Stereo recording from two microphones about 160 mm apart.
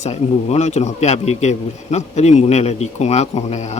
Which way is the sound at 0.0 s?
45° left (ahead or behind).